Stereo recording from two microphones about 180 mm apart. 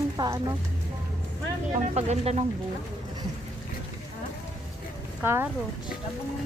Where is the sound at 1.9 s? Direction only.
35° right (ahead or behind).